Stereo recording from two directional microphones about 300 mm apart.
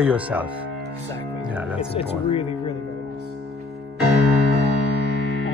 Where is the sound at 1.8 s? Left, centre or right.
Centre.